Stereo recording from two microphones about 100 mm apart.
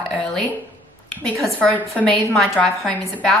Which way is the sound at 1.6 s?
15° left (ahead or behind).